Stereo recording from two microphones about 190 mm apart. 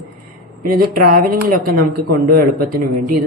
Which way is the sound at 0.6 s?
50° right (ahead or behind).